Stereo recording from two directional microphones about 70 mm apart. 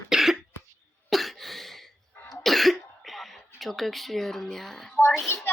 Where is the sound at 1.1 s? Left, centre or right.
Centre.